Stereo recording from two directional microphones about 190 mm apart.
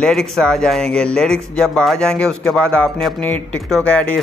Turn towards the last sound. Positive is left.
turn(degrees=5)  # may be behind; listen again after turning